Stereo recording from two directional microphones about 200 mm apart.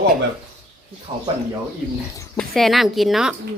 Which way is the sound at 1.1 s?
25° right (ahead or behind).